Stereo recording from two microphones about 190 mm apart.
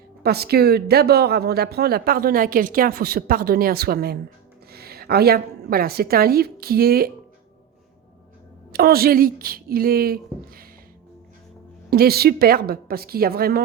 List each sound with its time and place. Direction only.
0.2 s a woman's voice: 55° right (ahead or behind)
8.7 s speech: 55° right (ahead or behind)
11.9 s speech: 55° right (ahead or behind)